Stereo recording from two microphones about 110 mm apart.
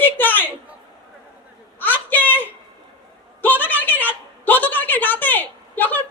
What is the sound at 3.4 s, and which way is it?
A woman's voice, 15° left (ahead or behind).